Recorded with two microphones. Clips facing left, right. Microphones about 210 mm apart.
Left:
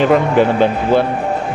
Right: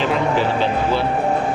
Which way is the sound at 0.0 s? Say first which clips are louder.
Left 7 dB; 50° left (ahead or behind).